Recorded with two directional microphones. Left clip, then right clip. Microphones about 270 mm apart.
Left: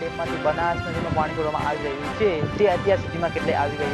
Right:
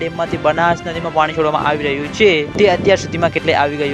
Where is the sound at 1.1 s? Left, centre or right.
Right.